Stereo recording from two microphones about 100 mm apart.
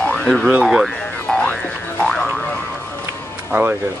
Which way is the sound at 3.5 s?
15° right (ahead or behind).